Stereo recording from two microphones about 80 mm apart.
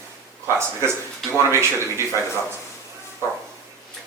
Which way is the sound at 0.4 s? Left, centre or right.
Right.